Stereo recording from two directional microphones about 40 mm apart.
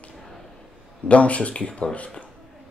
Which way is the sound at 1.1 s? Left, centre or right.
Left.